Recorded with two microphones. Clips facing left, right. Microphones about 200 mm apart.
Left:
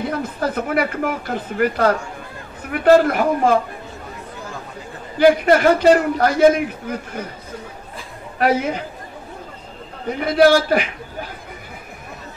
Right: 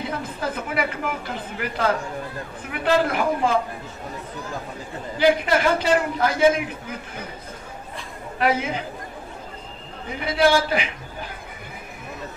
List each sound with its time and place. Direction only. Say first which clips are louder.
0.4 s a man's voice: left 6 dB; 50° left (ahead or behind)
5.2 s a man's voice: left 6 dB; 50° left (ahead or behind)
8.4 s a man's voice: left 4 dB; 50° left (ahead or behind)
10.0 s a man's voice: left 6 dB; 50° left (ahead or behind)